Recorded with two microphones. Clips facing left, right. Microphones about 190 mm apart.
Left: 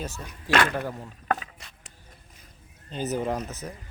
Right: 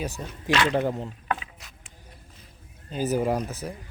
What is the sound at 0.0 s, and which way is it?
Speech, 15° right (ahead or behind).